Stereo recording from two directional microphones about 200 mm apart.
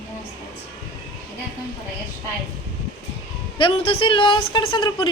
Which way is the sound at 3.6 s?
25° left (ahead or behind).